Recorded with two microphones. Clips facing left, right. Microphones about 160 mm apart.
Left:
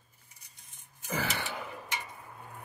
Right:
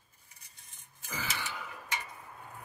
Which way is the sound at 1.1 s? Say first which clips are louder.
Left 5 dB; 60° left (ahead or behind).